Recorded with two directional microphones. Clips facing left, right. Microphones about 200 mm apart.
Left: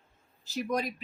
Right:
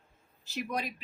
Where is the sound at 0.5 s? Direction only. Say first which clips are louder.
Left 4 dB; 40° left (ahead or behind).